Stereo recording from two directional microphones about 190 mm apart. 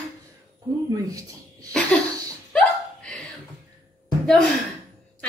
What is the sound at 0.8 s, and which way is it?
Speech, 20° right (ahead or behind).